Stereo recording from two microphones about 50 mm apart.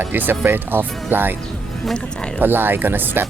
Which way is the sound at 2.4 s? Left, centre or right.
Right.